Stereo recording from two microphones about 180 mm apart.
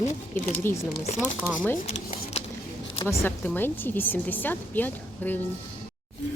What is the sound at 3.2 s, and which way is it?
Speech, 10° left (ahead or behind).